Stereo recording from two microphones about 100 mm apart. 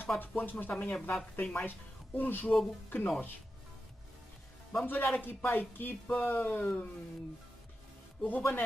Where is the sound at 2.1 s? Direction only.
20° left (ahead or behind).